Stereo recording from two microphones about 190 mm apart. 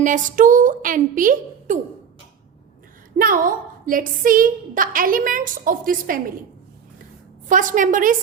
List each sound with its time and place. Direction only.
0.0 s a woman's voice: 45° right (ahead or behind)
3.2 s a woman's voice: 45° right (ahead or behind)
7.4 s a woman's voice: 45° right (ahead or behind)